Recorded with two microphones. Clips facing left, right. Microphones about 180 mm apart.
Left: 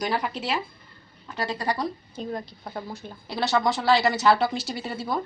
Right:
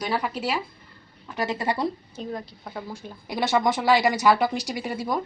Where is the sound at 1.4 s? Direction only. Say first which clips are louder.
Right 2 dB; 20° right (ahead or behind).